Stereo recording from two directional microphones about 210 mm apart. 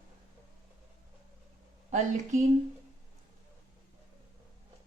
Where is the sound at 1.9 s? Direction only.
35° right (ahead or behind).